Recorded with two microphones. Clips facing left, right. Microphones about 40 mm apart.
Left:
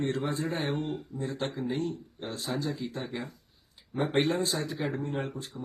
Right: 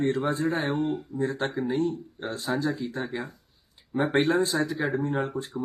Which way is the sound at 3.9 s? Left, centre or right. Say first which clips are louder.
Right 4 dB; right.